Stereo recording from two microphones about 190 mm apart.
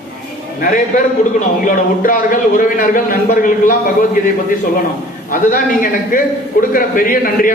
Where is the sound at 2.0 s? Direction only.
45° left (ahead or behind).